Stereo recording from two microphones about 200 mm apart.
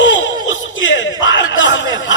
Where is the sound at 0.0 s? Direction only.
65° left (ahead or behind).